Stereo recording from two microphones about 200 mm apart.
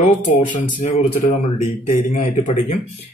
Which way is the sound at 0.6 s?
40° left (ahead or behind).